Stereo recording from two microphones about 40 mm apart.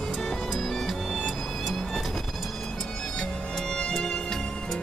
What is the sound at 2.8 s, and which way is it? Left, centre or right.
Music, centre.